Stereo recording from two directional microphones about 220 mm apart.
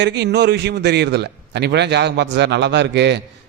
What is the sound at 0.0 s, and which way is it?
A man's voice, 50° right (ahead or behind).